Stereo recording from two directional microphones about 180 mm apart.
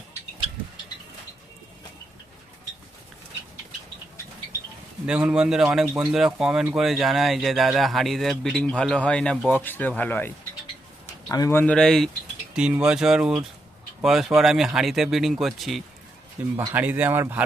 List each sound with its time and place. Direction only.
5.0 s speech: 5° right (ahead or behind)
16.4 s speech: 10° right (ahead or behind)